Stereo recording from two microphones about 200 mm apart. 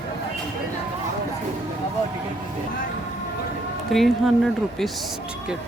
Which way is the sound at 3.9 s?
Centre (ahead or behind).